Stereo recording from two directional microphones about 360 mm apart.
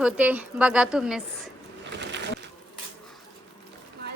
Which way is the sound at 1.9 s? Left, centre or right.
Right.